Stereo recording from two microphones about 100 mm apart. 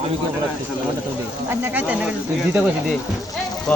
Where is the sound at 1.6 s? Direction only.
15° right (ahead or behind).